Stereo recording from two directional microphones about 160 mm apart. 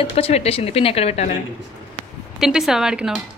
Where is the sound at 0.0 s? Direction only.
40° left (ahead or behind).